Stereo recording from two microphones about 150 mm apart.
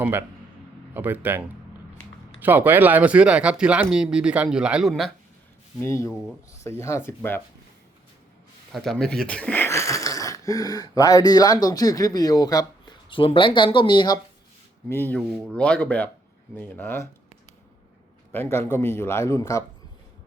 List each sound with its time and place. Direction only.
0.0 s speech: 15° right (ahead or behind)
5.8 s a man's voice: 20° left (ahead or behind)
8.7 s speech: centre (ahead or behind); by 14.2 s 30° left (ahead or behind)
14.8 s a man's voice: 15° left (ahead or behind)
18.3 s a man's voice: 15° left (ahead or behind)